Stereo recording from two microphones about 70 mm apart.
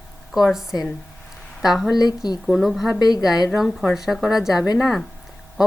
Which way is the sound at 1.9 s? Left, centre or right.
Left.